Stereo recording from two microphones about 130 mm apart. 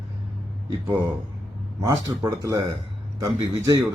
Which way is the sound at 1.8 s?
30° right (ahead or behind).